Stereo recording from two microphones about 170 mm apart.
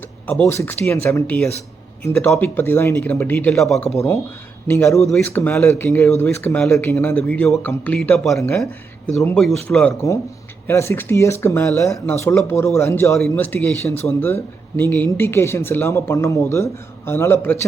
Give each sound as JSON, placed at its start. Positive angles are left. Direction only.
{"t": 0.3, "sound": "speech", "side_deg": 10}
{"t": 4.7, "sound": "speech", "side_deg": 15}
{"t": 9.9, "sound": "speech", "side_deg": 20}